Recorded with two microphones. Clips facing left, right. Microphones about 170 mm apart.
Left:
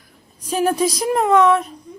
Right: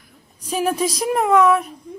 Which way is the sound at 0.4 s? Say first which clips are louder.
Left 2 dB; 10° right (ahead or behind).